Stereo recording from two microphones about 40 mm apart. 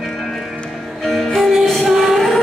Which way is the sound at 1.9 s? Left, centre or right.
Centre.